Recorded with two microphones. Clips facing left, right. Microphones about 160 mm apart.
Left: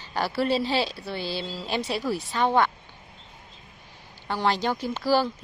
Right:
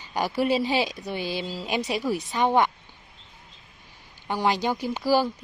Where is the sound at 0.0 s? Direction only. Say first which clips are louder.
Right 1 dB; 15° right (ahead or behind).